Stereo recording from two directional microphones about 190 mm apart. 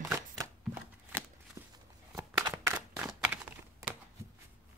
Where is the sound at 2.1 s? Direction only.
15° right (ahead or behind).